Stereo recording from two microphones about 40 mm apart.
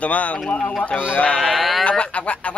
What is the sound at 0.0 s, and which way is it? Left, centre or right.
Speech, left.